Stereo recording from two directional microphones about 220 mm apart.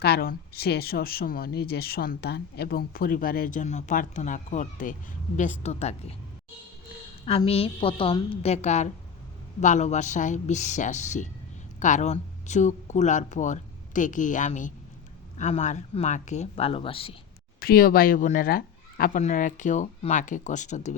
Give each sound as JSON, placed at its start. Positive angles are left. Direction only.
{"t": 0.0, "sound": "speech", "side_deg": 45}
{"t": 7.3, "sound": "a woman's voice", "side_deg": 25}
{"t": 17.6, "sound": "speech", "side_deg": 40}